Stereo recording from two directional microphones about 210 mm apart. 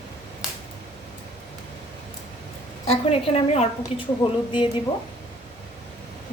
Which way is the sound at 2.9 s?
30° left (ahead or behind).